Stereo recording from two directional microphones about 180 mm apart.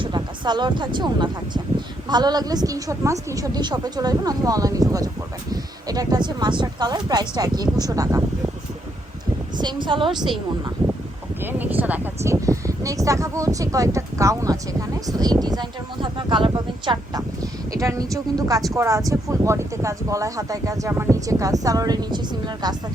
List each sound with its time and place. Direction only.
0.0 s a sound: 25° right (ahead or behind)
0.9 s speech: 25° right (ahead or behind)
9.6 s speech: 25° right (ahead or behind)
11.4 s speech: 10° right (ahead or behind)